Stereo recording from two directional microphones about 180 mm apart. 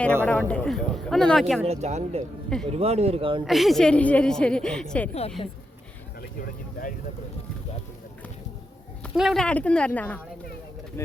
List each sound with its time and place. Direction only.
0.3 s a woman's voice: 10° left (ahead or behind)
1.6 s speech: 35° right (ahead or behind)
3.4 s a woman's voice: centre (ahead or behind)
5.4 s a woman's voice: 30° left (ahead or behind)
6.4 s speech: 50° left (ahead or behind)
9.0 s speech: centre (ahead or behind)